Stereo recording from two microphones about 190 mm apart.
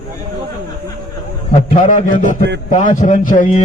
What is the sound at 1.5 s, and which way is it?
A man's voice, 45° left (ahead or behind).